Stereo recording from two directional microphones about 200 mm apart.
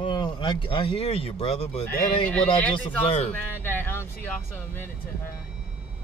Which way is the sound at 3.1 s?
35° left (ahead or behind).